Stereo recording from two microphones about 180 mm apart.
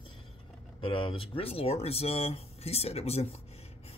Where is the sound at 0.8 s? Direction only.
30° left (ahead or behind).